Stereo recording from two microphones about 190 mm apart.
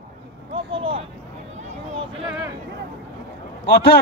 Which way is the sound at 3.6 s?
60° left (ahead or behind).